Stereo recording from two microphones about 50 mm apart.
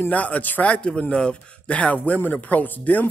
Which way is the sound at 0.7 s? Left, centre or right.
Centre.